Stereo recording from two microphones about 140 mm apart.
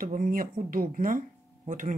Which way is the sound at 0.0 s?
80° right.